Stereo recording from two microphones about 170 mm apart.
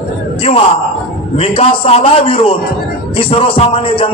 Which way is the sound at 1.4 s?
35° left (ahead or behind).